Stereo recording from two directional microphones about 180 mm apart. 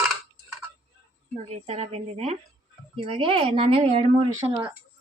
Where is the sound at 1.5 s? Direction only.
35° right (ahead or behind).